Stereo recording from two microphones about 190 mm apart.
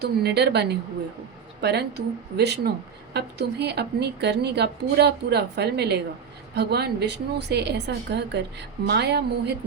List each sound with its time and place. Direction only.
0.0 s a woman's voice: 60° right (ahead or behind)